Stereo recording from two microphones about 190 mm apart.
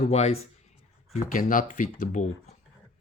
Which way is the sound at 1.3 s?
45° left (ahead or behind).